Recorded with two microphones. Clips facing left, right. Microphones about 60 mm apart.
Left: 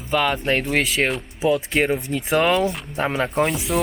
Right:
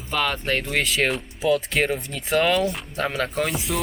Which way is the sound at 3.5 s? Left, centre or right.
Centre.